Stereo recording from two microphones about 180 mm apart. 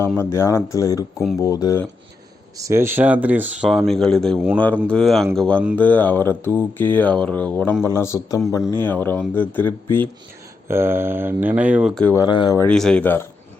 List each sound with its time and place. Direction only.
0.2 s mantra: 15° left (ahead or behind)
2.6 s speech: 15° right (ahead or behind); by 5.6 s 5° left (ahead or behind)
5.7 s mantra: 10° left (ahead or behind)
10.7 s speech: 15° right (ahead or behind)
12.0 s speech: 20° left (ahead or behind)
12.5 s mantra: 5° left (ahead or behind)